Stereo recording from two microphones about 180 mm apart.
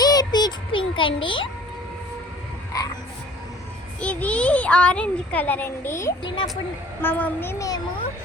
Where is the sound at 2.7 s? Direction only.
20° left (ahead or behind).